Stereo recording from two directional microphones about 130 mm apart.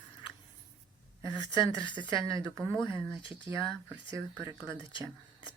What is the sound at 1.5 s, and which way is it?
Speech, 35° left (ahead or behind).